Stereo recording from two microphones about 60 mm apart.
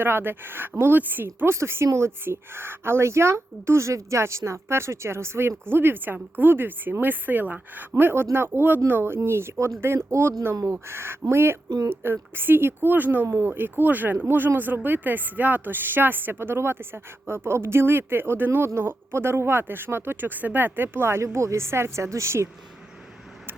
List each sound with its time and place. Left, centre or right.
0.0 s a woman's voice: right
1.5 s a woman's voice: right